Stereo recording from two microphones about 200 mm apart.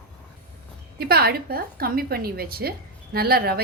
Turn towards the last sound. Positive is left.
turn(degrees=-50)  # may be behind; listen again after turning